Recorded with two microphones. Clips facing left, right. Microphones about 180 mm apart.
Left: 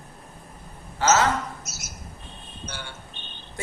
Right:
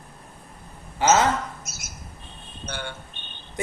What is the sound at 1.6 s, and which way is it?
Squawk, 55° right (ahead or behind).